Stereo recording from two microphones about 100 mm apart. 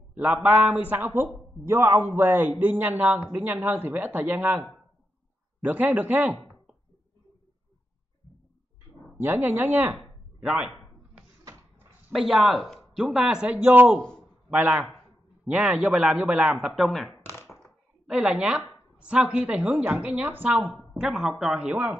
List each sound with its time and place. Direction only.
0.1 s a man's voice: 15° right (ahead or behind)
5.6 s speech: 15° right (ahead or behind)
9.2 s a man's voice: 20° right (ahead or behind)
10.4 s speech: 10° right (ahead or behind)
12.1 s a man's voice: centre (ahead or behind)
17.6 s a sound: 5° right (ahead or behind)
18.9 s speech: 10° right (ahead or behind)
21.0 s speech: 5° right (ahead or behind)
21.5 s speech: 15° right (ahead or behind)